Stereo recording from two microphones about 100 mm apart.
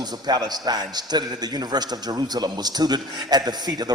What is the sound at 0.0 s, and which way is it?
A man's voice, 45° right (ahead or behind).